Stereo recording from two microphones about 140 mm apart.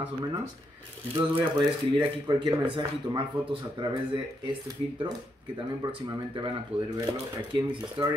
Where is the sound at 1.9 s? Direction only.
35° right (ahead or behind).